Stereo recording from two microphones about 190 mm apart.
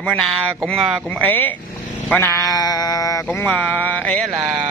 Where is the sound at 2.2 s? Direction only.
15° left (ahead or behind).